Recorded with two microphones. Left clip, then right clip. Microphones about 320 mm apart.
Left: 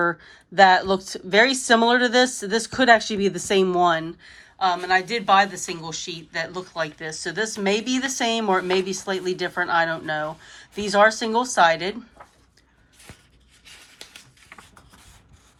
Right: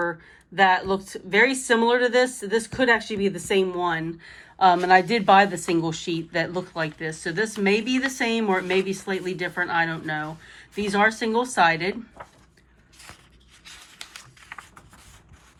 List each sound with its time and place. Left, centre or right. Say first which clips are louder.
0.3 s a woman's voice: left 4 dB; centre
4.2 s a woman's voice: right 4 dB; centre
14.5 s a sound: right 5 dB; centre